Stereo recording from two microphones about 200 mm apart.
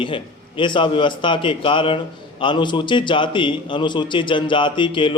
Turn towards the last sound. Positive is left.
turn(degrees=25)  # may be behind; listen again after turning